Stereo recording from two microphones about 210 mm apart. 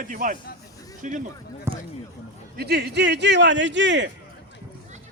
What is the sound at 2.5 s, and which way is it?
A man's voice, 50° right (ahead or behind).